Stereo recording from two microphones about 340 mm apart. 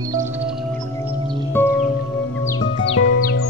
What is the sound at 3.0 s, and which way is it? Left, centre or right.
Music, left.